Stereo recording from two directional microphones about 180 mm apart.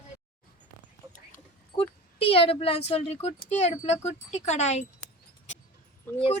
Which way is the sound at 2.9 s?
35° left (ahead or behind).